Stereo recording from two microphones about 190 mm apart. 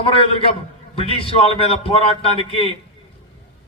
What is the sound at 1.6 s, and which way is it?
Speech, 30° left (ahead or behind).